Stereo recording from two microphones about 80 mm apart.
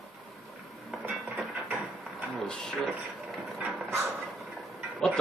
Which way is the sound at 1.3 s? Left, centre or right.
Centre.